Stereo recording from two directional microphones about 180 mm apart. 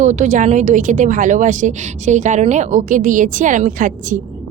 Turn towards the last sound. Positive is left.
turn(degrees=-45)  # may be behind; listen again after turning